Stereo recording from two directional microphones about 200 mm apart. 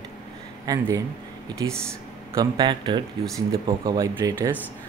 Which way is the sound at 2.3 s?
20° right (ahead or behind).